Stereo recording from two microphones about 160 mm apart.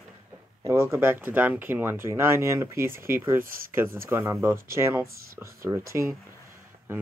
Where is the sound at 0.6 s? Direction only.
15° right (ahead or behind).